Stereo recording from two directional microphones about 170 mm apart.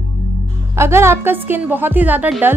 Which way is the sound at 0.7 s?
15° right (ahead or behind).